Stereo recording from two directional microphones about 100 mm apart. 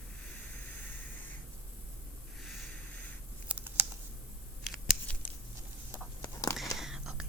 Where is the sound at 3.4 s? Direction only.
15° right (ahead or behind).